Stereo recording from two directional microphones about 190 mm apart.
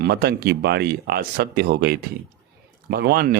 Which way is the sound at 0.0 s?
55° right (ahead or behind).